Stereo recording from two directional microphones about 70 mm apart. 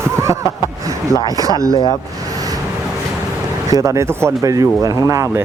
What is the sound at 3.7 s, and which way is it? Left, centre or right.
Speech, right.